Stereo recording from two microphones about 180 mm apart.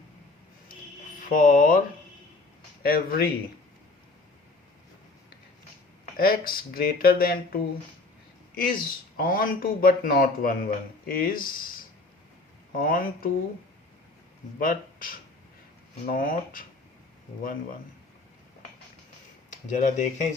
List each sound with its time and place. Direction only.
1.2 s speech: 50° left (ahead or behind)
2.8 s speech: 55° left (ahead or behind)
6.1 s speech: 55° left (ahead or behind)
12.7 s speech: 55° left (ahead or behind)
14.6 s speech: 50° left (ahead or behind)
19.6 s speech: 45° left (ahead or behind)